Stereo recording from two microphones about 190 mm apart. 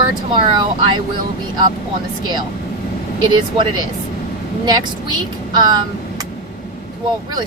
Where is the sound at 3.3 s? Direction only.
25° right (ahead or behind).